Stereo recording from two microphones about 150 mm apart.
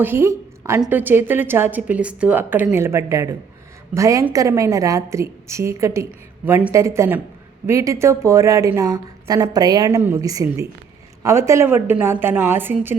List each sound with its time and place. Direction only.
0.0 s a woman's voice: 15° right (ahead or behind)